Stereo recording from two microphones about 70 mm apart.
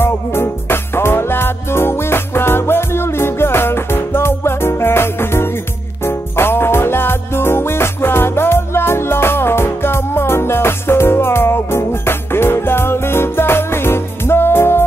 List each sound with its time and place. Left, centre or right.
0.0 s music: left